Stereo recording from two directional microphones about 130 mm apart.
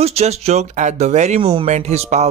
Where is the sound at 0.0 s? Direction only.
55° right (ahead or behind).